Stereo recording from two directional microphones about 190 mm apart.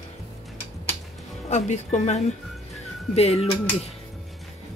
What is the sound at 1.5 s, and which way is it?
Speech, 35° left (ahead or behind).